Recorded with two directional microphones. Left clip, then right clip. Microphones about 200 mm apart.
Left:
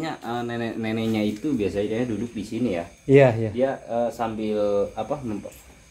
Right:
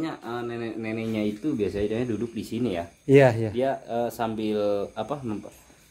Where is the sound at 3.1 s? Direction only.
25° right (ahead or behind).